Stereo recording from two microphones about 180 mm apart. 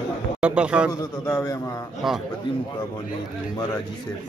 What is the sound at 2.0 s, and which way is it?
Speech, centre (ahead or behind).